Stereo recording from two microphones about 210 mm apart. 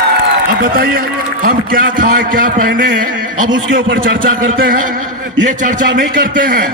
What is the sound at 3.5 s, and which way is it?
Speech, 60° right (ahead or behind).